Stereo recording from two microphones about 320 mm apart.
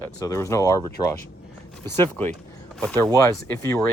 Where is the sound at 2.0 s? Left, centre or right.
Centre.